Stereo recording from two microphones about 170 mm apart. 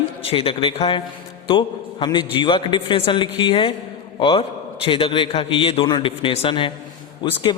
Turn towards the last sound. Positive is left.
turn(degrees=25)  # may be behind; listen again after turning